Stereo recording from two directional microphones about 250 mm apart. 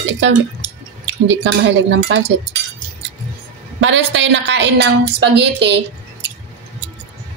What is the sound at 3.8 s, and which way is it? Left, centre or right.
A woman's voice, right.